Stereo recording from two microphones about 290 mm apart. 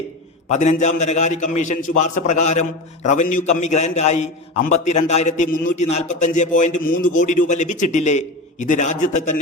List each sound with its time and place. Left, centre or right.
0.5 s a man's voice: left